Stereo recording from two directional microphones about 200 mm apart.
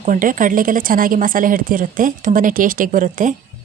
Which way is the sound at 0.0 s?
40° right (ahead or behind).